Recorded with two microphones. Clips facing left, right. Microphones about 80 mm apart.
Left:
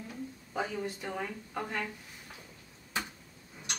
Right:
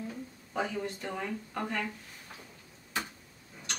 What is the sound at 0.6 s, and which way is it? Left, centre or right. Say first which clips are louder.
A man's voice: right 1 dB; centre.